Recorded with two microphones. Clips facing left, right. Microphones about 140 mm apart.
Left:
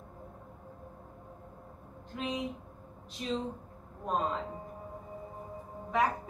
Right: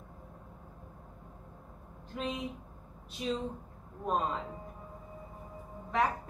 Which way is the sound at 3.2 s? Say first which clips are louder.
Right 1 dB; 5° right (ahead or behind).